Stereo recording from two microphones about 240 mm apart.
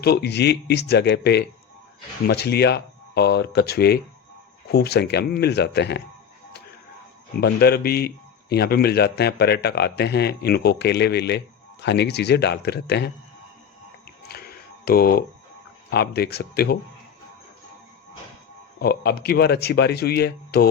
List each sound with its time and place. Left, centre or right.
0.0 s a man's voice: left
7.4 s a man's voice: left
14.3 s a sound: left
15.9 s speech: left
18.8 s speech: left